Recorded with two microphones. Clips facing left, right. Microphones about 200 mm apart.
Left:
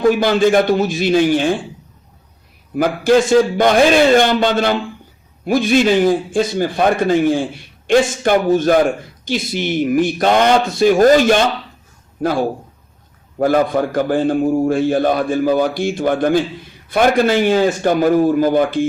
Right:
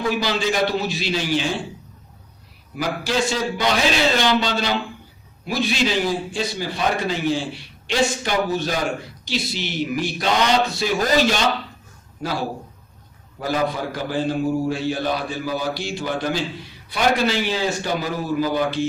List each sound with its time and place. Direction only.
0.0 s a man's voice: 50° left (ahead or behind)
2.7 s a man's voice: 50° left (ahead or behind)